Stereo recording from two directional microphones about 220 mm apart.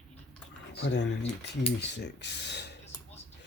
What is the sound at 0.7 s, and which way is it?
Speech, 50° left (ahead or behind).